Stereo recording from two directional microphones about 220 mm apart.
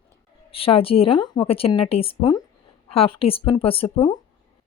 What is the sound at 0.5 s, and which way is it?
A woman's voice, 25° left (ahead or behind).